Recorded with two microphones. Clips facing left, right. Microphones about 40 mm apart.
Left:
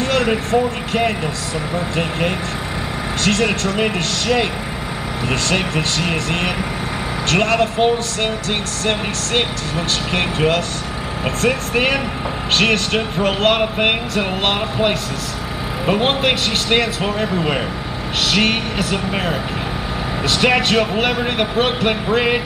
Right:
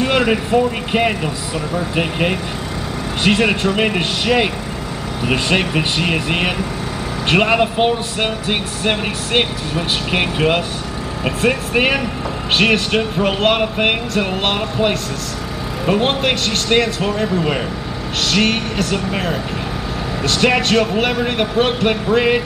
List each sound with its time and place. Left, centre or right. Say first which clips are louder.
0.0 s speech: right 2 dB; centre